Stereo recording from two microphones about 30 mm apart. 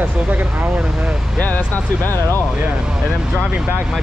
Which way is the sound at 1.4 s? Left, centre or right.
Left.